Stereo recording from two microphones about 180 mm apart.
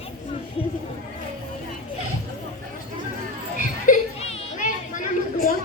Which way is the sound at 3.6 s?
45° left (ahead or behind).